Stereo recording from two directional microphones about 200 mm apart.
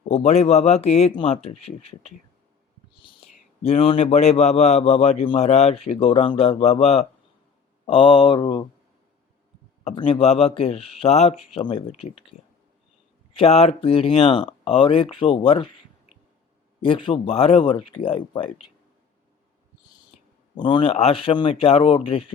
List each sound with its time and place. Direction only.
0.1 s a man's voice: 35° left (ahead or behind)
3.6 s a man's voice: 30° left (ahead or behind)
9.8 s speech: 25° left (ahead or behind)
13.3 s speech: 30° left (ahead or behind)
16.8 s speech: 25° left (ahead or behind)
20.6 s speech: 25° left (ahead or behind)